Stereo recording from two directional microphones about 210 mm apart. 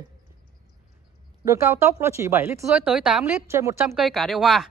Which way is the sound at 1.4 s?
15° right (ahead or behind).